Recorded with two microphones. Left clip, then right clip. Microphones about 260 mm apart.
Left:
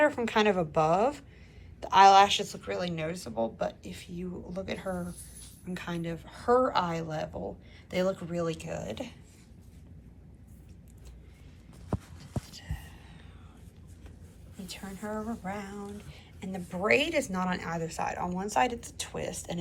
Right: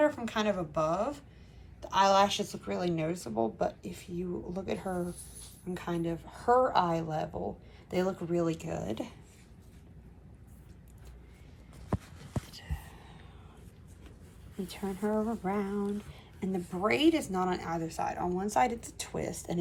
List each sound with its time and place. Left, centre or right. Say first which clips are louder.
0.0 s a woman's voice: left 4 dB; centre
14.8 s a woman's voice: right 6 dB; right